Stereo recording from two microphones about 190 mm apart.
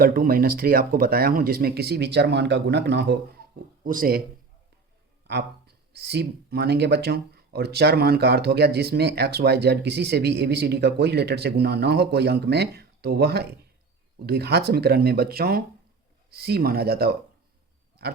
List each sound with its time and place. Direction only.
0.0 s speech: 50° right (ahead or behind)
3.8 s speech: 45° right (ahead or behind)
5.3 s speech: 60° right (ahead or behind)
18.0 s pig: 55° right (ahead or behind)